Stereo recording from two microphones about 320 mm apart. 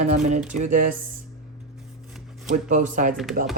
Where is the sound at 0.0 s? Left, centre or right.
Right.